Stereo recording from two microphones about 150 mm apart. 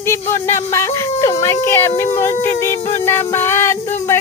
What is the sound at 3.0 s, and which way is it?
Music, 15° left (ahead or behind).